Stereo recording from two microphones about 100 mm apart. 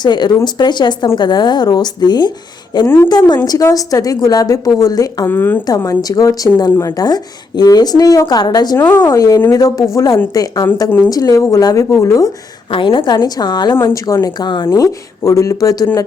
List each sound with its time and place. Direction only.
0.0 s a woman's voice: 45° left (ahead or behind)
2.8 s a woman's voice: 25° left (ahead or behind)
3.1 s a woman's voice: 45° left (ahead or behind)
5.3 s a woman's voice: 20° left (ahead or behind)
5.6 s a woman's voice: 35° left (ahead or behind)
12.7 s a woman's voice: 60° left (ahead or behind)
14.7 s a woman's voice: 30° left (ahead or behind)